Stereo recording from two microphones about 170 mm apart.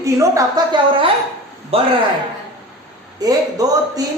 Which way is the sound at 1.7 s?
35° right (ahead or behind).